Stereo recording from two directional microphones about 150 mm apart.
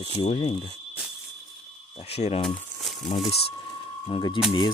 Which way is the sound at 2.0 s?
45° left (ahead or behind).